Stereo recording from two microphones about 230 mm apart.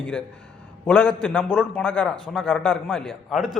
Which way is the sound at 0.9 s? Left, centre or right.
Centre.